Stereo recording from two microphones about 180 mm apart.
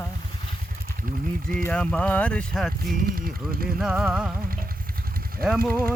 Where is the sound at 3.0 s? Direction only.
55° right (ahead or behind).